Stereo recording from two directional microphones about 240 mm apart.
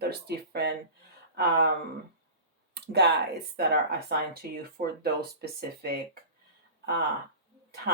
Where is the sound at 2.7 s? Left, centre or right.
Right.